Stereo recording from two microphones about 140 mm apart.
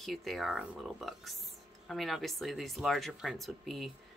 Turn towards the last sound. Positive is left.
turn(degrees=0)  # may be behind; listen again after turning